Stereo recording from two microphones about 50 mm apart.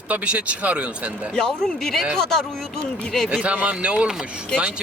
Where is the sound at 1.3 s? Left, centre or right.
Centre.